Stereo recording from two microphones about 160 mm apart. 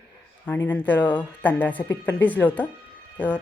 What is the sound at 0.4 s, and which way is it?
A woman's voice, 15° left (ahead or behind).